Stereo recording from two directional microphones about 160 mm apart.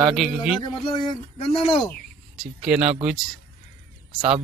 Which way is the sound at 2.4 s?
5° right (ahead or behind).